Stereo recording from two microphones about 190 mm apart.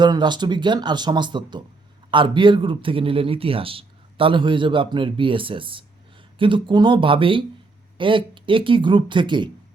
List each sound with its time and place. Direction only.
0.0 s a man's voice: 25° right (ahead or behind)